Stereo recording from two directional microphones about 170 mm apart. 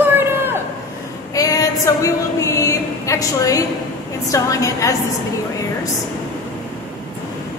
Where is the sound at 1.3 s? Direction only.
20° left (ahead or behind).